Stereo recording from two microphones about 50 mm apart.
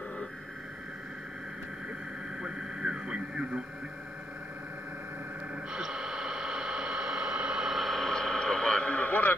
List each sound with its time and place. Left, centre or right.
2.4 s radio: centre
5.7 s a sound: centre
7.7 s radio: centre; by 9.3 s left